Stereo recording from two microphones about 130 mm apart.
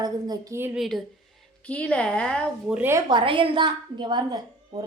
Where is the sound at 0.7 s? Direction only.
Centre (ahead or behind).